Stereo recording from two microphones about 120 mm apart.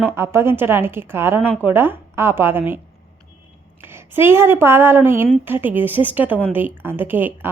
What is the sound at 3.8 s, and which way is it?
A woman's voice, 20° right (ahead or behind).